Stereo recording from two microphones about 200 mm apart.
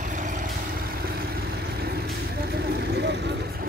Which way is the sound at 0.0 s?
40° right (ahead or behind).